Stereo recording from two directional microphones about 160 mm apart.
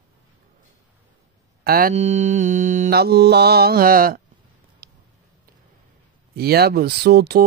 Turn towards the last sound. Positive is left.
turn(degrees=-90)